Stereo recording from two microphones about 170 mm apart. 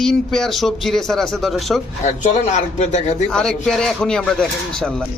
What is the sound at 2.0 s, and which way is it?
Speech, 45° left (ahead or behind).